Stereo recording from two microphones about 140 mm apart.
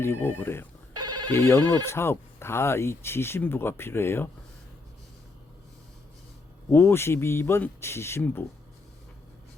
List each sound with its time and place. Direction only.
0.0 s speech: 15° left (ahead or behind)
0.9 s telephone bell ringing: 30° right (ahead or behind)
1.3 s speech: 15° left (ahead or behind)
6.7 s speech: 15° left (ahead or behind)